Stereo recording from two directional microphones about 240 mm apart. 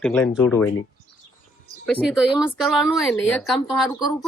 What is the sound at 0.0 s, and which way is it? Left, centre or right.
Speech, centre.